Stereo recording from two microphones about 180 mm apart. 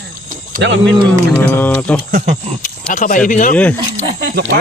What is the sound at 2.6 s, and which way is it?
Speech, 45° left (ahead or behind).